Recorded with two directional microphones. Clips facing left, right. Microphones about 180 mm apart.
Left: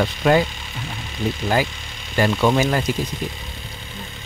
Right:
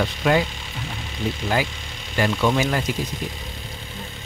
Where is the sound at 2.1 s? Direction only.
40° left (ahead or behind).